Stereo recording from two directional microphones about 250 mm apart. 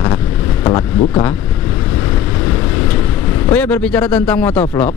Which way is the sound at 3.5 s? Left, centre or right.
Centre.